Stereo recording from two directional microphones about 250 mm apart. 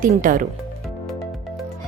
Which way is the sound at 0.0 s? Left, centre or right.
Right.